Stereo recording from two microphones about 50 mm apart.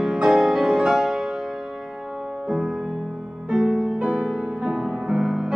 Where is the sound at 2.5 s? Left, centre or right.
Centre.